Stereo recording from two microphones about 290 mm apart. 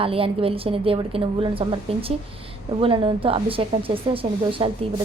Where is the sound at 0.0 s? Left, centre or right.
Centre.